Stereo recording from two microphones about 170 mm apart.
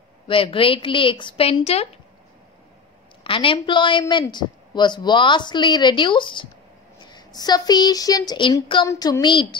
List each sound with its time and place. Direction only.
0.3 s a woman's voice: 30° left (ahead or behind)
3.3 s a woman's voice: 30° left (ahead or behind)